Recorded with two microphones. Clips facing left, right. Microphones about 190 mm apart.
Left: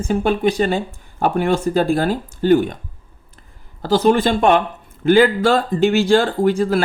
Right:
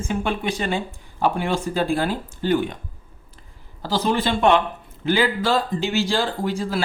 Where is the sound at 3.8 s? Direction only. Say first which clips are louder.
Left 7 dB; 50° left (ahead or behind).